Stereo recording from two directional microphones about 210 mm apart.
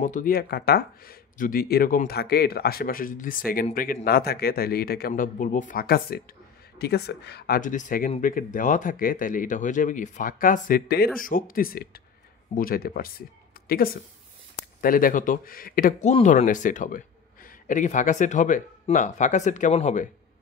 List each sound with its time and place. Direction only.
0.0 s speech: 40° left (ahead or behind)